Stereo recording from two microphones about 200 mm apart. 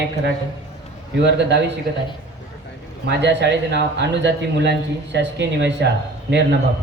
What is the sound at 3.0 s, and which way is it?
A man's voice, 60° right (ahead or behind).